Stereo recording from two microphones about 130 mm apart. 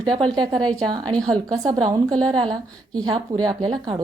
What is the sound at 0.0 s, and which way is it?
A woman's voice, 35° right (ahead or behind).